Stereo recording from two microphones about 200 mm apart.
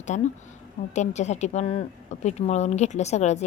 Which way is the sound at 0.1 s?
35° left (ahead or behind).